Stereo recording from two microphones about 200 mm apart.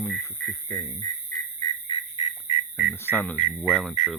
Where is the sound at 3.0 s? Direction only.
10° left (ahead or behind).